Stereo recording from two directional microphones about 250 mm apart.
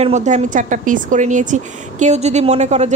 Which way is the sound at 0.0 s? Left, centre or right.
Right.